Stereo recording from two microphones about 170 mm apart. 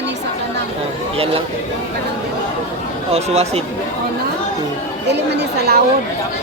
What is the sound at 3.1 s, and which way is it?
Speech, 40° right (ahead or behind).